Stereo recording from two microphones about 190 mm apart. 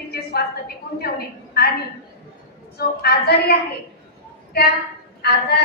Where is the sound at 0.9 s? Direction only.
55° left (ahead or behind).